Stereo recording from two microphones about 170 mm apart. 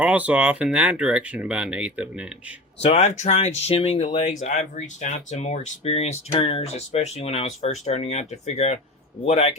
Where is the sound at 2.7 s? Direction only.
40° left (ahead or behind).